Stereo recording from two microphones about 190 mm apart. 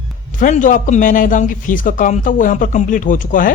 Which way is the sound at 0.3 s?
45° left (ahead or behind).